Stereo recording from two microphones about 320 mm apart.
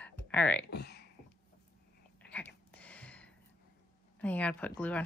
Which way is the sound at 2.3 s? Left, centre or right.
Centre.